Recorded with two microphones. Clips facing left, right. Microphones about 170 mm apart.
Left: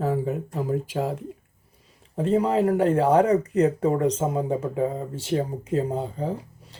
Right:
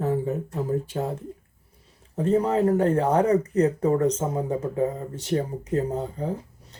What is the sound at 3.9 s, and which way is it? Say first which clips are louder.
Speech: even; 15° left (ahead or behind).